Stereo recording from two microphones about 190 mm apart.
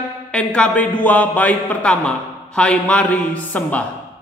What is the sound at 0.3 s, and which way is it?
A man's voice, 5° left (ahead or behind).